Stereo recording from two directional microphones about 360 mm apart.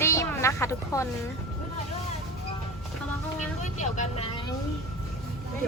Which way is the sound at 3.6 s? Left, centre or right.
Centre.